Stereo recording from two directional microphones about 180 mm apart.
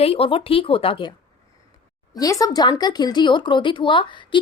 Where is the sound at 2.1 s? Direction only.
20° left (ahead or behind).